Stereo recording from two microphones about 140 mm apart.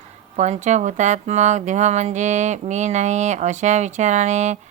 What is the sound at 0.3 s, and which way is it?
Speech, 55° right (ahead or behind).